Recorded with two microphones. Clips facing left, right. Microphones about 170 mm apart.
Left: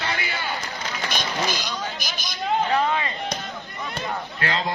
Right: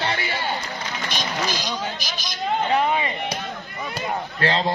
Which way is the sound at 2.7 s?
15° right (ahead or behind).